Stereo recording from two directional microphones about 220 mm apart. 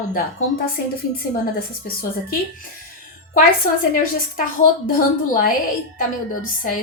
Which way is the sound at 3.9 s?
40° left (ahead or behind).